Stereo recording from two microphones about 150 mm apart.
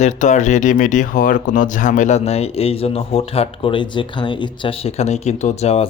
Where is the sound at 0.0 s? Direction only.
55° left (ahead or behind).